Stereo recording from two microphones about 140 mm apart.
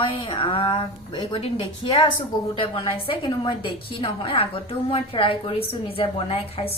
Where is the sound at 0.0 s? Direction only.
40° left (ahead or behind).